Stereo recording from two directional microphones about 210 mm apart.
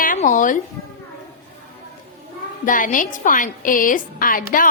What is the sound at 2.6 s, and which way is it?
A woman's voice, 40° left (ahead or behind).